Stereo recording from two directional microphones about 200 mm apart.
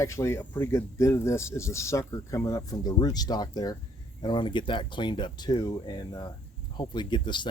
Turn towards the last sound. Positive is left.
turn(degrees=25)  # may be behind; listen again after turning